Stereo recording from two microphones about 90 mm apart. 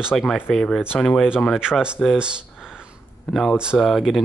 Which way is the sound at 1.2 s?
5° right (ahead or behind).